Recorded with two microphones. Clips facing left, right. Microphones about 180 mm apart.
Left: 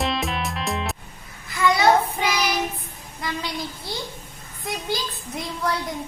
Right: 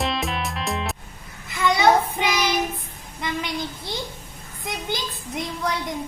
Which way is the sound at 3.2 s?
20° right (ahead or behind).